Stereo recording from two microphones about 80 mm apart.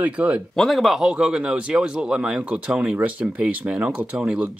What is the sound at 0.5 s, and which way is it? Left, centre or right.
Speech, centre.